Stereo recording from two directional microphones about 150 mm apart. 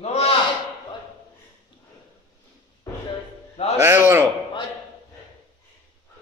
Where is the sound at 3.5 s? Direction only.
45° left (ahead or behind).